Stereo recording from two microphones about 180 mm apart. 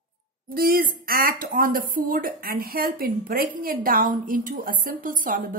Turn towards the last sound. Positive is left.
turn(degrees=-50)  # may be behind; listen again after turning